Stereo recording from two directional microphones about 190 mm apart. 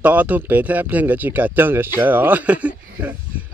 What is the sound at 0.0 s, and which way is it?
Speech, 10° right (ahead or behind).